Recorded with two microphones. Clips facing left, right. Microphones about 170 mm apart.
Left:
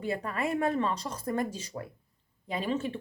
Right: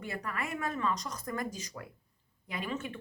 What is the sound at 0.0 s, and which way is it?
A woman's voice, 30° left (ahead or behind).